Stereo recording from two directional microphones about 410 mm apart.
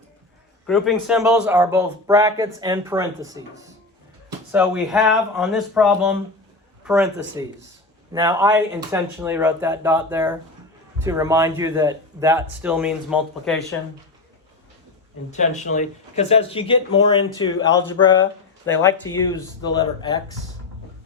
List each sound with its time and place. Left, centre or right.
0.7 s speech: centre
4.5 s speech: centre
15.3 s speech: centre